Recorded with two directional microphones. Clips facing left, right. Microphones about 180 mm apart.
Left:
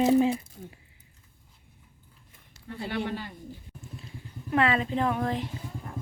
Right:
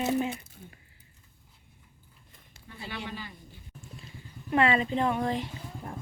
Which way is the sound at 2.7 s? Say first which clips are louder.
Left 8 dB; 60° left (ahead or behind).